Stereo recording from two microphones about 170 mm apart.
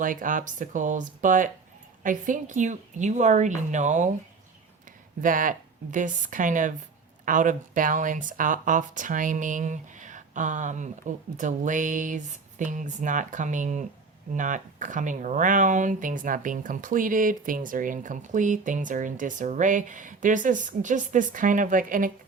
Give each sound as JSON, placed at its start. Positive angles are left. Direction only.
{"t": 0.0, "sound": "speech", "side_deg": -50}